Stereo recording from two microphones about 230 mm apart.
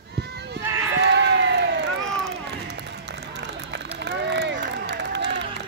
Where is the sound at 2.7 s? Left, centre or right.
Right.